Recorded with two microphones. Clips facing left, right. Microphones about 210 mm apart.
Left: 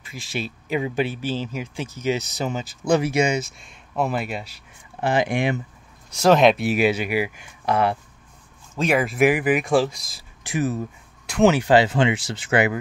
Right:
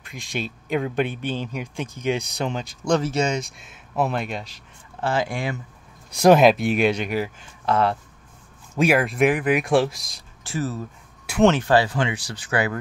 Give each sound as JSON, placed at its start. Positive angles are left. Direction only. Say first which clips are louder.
{"t": 0.0, "sound": "speech", "louder": "even", "side_deg": 5}
{"t": 5.0, "sound": "speech", "louder": "left 3 dB", "side_deg": 20}
{"t": 6.1, "sound": "speech", "louder": "right 2 dB", "side_deg": -15}
{"t": 6.4, "sound": "speech", "louder": "even", "side_deg": 0}
{"t": 8.7, "sound": "speech", "louder": "right 1 dB", "side_deg": -5}
{"t": 10.4, "sound": "speech", "louder": "left 3 dB", "side_deg": 15}